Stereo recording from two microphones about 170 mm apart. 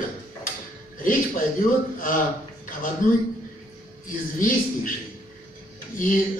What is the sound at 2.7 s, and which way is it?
Speech, 55° left (ahead or behind).